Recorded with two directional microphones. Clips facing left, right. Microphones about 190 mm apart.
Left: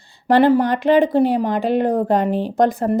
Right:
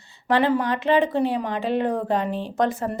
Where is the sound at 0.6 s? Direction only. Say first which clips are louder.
Left 5 dB; 50° left (ahead or behind).